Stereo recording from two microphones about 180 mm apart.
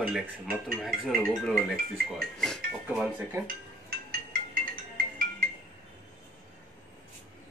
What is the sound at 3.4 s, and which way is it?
Dishes, 55° right (ahead or behind).